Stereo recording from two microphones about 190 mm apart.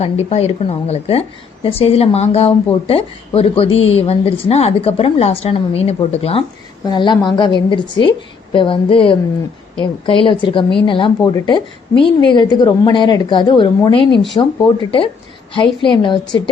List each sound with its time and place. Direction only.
0.0 s a woman's voice: 35° left (ahead or behind)